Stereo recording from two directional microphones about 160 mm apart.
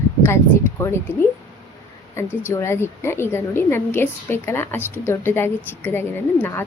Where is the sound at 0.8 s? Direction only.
15° left (ahead or behind).